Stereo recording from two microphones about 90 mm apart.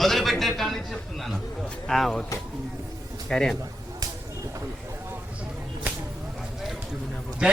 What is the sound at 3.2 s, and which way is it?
Speech, 5° left (ahead or behind).